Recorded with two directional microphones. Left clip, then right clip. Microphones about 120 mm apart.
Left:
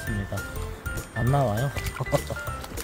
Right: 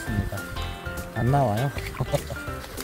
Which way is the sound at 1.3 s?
15° left (ahead or behind).